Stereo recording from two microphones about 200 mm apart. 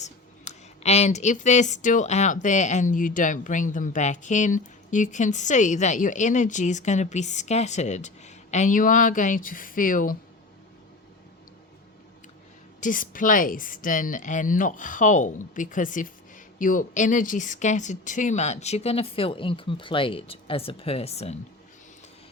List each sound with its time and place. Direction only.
0.0 s speech: 35° left (ahead or behind)
12.8 s speech: 40° left (ahead or behind)